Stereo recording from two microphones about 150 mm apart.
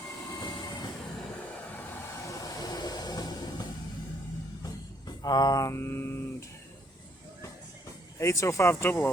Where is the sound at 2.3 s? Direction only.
25° left (ahead or behind).